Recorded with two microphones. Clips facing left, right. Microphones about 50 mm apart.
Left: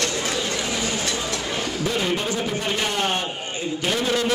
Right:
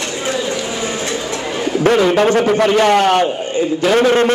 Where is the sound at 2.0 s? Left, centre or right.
Right.